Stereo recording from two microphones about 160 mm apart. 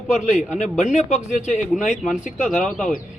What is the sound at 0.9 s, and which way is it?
Speech, 50° left (ahead or behind).